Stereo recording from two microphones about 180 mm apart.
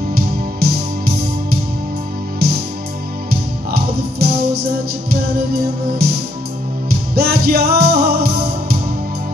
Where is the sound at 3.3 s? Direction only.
60° right (ahead or behind).